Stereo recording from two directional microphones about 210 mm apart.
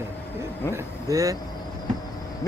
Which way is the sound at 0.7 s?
15° right (ahead or behind).